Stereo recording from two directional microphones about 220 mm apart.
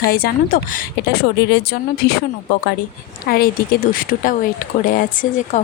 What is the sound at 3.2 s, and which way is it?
A woman's voice, 45° left (ahead or behind).